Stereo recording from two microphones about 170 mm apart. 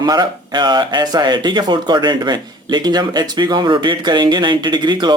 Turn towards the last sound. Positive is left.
turn(degrees=-25)  # may be behind; listen again after turning